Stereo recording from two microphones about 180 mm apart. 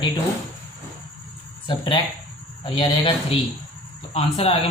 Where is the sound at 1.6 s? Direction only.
25° left (ahead or behind).